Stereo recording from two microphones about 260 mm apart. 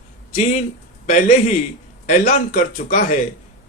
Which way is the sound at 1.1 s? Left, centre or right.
Left.